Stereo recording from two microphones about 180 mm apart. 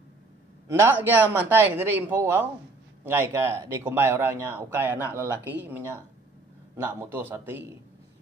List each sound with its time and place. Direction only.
0.7 s a man's voice: 15° right (ahead or behind)